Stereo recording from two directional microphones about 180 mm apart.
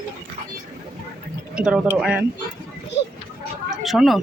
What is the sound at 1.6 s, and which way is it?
Speech, 5° right (ahead or behind).